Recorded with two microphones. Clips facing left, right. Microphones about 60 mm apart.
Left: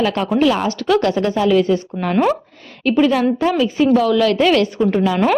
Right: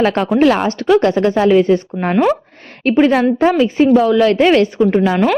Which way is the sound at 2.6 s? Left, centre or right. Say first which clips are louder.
Right 2 dB; right.